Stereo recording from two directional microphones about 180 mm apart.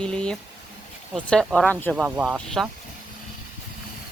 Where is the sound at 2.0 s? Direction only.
5° right (ahead or behind).